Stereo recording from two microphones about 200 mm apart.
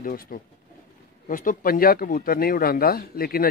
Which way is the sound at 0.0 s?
45° left (ahead or behind).